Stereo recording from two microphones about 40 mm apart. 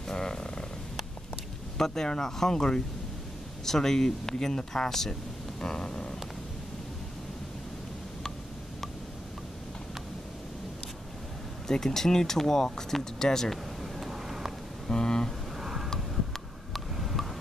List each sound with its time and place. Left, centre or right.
0.1 s purr: centre
1.8 s speech: centre
5.6 s a sound: centre
11.6 s speech: centre
13.9 s vehicle: centre
14.9 s vehicle: centre
15.6 s vehicle: centre
16.7 s a sound: centre